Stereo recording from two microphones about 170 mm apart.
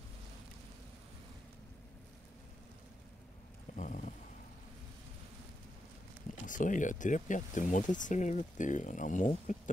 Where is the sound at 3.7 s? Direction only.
50° left (ahead or behind).